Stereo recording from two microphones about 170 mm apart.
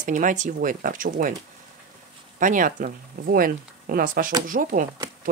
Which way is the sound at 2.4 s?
50° right (ahead or behind).